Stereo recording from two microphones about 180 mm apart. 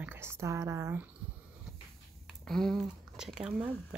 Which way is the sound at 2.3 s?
Centre (ahead or behind).